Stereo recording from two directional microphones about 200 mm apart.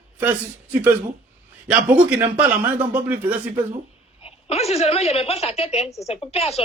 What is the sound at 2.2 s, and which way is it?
Speech, 10° right (ahead or behind).